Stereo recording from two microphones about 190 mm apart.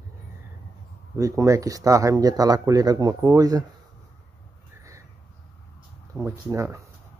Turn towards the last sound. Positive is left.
turn(degrees=-15)  # may be behind; listen again after turning